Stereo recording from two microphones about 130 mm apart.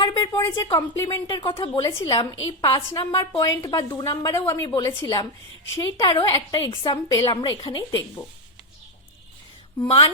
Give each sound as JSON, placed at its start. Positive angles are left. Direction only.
{"t": 0.0, "sound": "a woman's voice", "side_deg": 30}
{"t": 1.0, "sound": "a woman's voice", "side_deg": 35}
{"t": 1.8, "sound": "a woman's voice", "side_deg": 20}
{"t": 9.8, "sound": "speech", "side_deg": 45}